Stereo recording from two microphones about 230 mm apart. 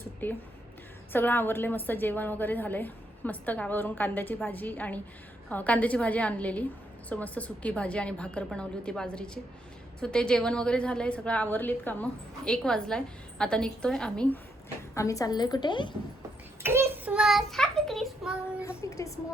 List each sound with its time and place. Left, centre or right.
0.2 s a woman's voice: centre
14.9 s a woman's voice: centre
16.6 s child singing: centre
18.8 s a woman's voice: centre